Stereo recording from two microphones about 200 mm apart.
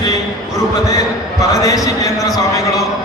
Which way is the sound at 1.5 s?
15° left (ahead or behind).